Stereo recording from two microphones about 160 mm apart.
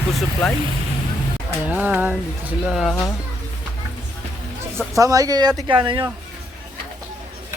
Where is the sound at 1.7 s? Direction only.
10° right (ahead or behind).